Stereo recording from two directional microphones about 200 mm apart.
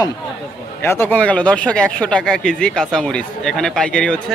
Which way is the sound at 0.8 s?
10° left (ahead or behind).